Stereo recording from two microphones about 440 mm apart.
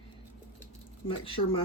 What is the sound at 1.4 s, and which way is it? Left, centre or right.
Speech, left.